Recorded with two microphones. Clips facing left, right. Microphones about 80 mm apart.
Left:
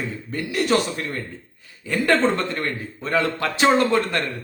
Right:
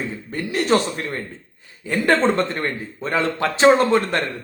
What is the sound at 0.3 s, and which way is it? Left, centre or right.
Speech, right.